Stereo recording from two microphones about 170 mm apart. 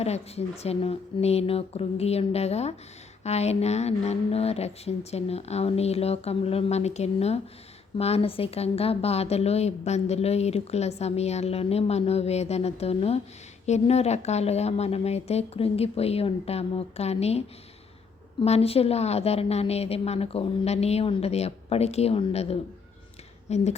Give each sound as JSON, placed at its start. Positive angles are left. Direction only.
{"t": 0.0, "sound": "a woman's voice", "side_deg": 40}